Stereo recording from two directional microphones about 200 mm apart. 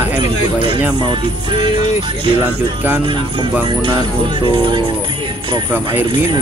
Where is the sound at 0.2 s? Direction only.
25° right (ahead or behind).